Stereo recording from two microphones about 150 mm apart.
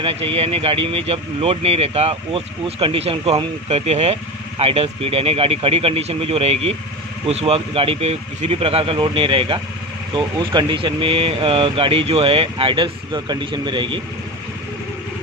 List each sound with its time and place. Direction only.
0.0 s speech: 40° right (ahead or behind)